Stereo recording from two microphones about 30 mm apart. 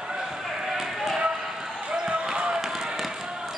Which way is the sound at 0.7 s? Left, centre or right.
Centre.